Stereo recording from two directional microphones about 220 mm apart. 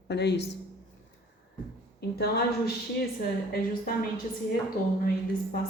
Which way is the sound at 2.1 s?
45° left (ahead or behind).